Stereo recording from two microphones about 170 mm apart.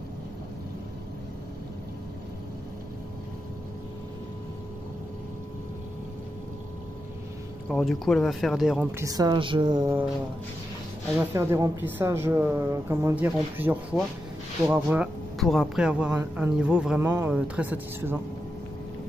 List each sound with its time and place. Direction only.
7.6 s speech: centre (ahead or behind)
8.9 s speech: 20° right (ahead or behind)
11.1 s speech: 15° right (ahead or behind)
15.4 s speech: centre (ahead or behind)